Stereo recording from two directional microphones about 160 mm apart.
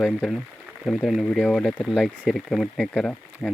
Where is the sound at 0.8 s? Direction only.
Centre (ahead or behind).